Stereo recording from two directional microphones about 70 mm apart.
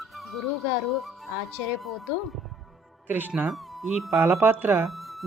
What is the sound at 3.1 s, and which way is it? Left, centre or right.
Speech, right.